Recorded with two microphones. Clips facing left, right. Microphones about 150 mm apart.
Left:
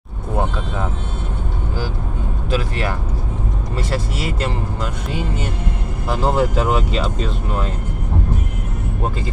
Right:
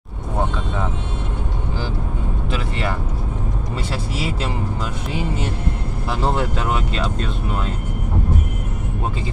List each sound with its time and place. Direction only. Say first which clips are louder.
3.7 s speech: left 4 dB; centre (ahead or behind)
6.0 s speech: left 4 dB; centre (ahead or behind)